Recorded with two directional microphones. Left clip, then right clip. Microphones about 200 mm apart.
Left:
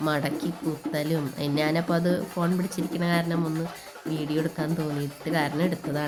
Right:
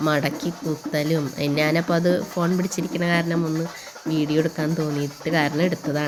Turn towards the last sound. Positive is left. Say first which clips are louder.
# right 5 dB
turn(degrees=-10)  # may be behind; listen again after turning